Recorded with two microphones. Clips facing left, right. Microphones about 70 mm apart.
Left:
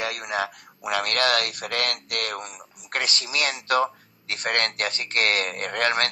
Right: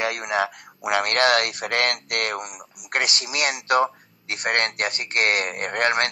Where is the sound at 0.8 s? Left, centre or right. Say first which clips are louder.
Right 4 dB; right.